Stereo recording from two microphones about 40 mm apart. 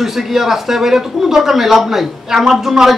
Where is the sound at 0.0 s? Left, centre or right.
Centre.